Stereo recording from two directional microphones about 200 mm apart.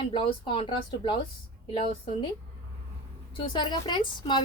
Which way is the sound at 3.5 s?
20° left (ahead or behind).